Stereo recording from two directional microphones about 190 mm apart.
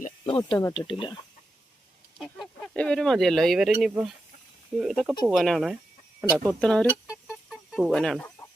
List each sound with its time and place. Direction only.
0.3 s speech: 25° left (ahead or behind)
2.1 s speech: centre (ahead or behind)
7.1 s chicken: 5° right (ahead or behind)